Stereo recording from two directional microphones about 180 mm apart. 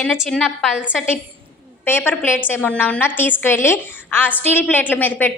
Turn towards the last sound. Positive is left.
turn(degrees=10)  # may be behind; listen again after turning